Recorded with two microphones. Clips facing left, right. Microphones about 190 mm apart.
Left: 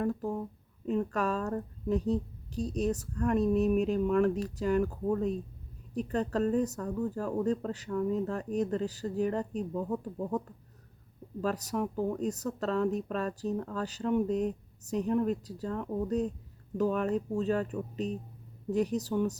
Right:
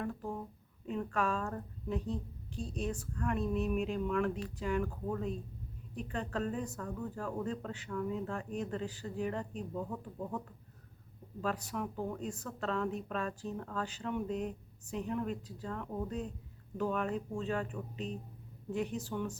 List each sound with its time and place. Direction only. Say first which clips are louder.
0.0 s speech: left 7 dB; 40° left (ahead or behind)